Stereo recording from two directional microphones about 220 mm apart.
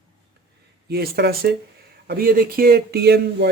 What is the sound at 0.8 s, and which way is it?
Speech, 45° right (ahead or behind).